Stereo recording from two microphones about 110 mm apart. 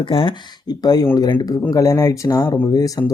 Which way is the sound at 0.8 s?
35° left (ahead or behind).